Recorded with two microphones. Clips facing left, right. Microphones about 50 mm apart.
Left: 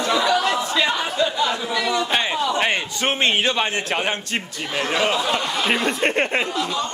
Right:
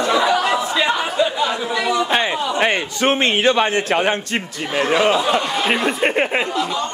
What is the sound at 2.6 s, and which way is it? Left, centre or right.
A man's voice, right.